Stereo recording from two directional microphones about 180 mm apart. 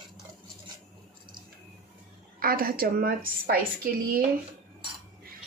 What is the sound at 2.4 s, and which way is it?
A woman's voice, 55° right (ahead or behind).